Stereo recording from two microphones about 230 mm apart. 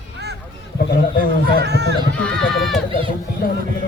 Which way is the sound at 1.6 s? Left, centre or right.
Right.